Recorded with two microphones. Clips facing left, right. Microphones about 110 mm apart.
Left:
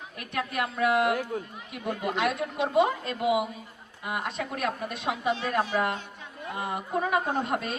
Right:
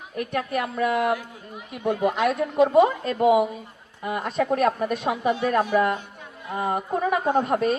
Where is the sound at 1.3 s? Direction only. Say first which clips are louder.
Left 10 dB; 50° left (ahead or behind).